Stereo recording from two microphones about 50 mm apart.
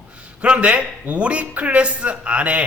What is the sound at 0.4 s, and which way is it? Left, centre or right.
A man's voice, right.